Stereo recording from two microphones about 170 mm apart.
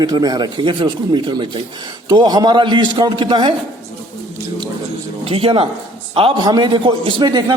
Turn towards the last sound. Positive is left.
turn(degrees=-25)  # may be behind; listen again after turning